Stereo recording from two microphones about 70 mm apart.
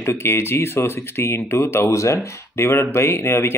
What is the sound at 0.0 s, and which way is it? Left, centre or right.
Speech, left.